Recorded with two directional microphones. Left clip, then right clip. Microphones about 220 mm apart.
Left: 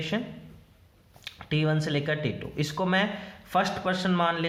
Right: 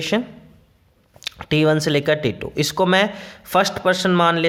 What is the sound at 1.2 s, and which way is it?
Speech, 50° right (ahead or behind).